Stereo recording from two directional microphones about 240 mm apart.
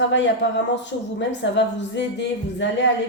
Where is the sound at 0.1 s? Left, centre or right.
Left.